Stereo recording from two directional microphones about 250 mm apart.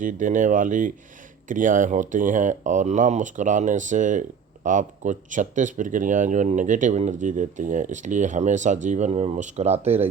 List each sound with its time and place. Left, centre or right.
0.0 s speech: right